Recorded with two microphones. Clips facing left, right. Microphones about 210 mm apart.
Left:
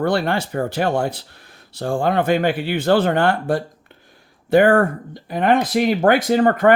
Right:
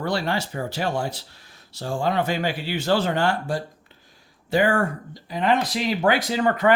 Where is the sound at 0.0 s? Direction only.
55° left (ahead or behind).